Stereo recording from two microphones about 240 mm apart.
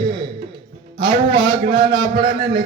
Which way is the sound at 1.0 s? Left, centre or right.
Centre.